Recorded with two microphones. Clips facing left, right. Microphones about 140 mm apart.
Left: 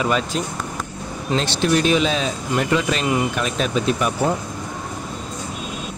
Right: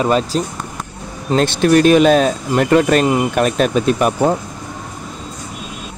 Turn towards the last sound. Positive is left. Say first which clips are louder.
# right 5 dB
turn(degrees=-50)  # may be behind; listen again after turning